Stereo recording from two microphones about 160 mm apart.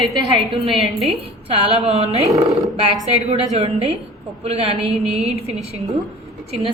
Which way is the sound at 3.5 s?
40° right (ahead or behind).